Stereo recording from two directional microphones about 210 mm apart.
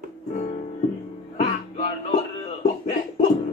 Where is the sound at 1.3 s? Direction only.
35° left (ahead or behind).